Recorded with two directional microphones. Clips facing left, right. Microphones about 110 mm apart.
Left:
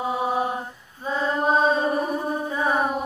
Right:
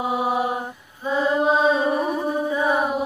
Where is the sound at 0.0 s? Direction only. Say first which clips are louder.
Right 2 dB; 15° right (ahead or behind).